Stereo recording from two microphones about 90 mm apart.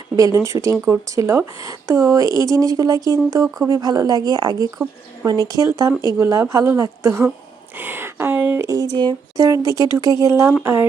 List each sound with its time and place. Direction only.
0.2 s a woman's voice: 35° right (ahead or behind)
9.4 s speech: 35° right (ahead or behind)